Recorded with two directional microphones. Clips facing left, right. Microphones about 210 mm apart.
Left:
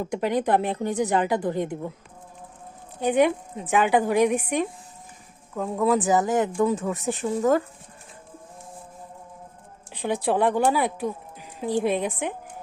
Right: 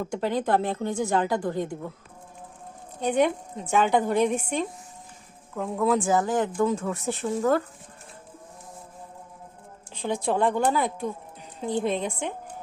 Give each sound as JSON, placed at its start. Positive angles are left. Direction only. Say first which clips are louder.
{"t": 0.0, "sound": "a woman's voice", "louder": "left 2 dB", "side_deg": 15}
{"t": 3.0, "sound": "a woman's voice", "louder": "left 2 dB", "side_deg": 10}
{"t": 6.0, "sound": "a woman's voice", "louder": "left 2 dB", "side_deg": 20}
{"t": 9.9, "sound": "speech", "louder": "left 2 dB", "side_deg": 15}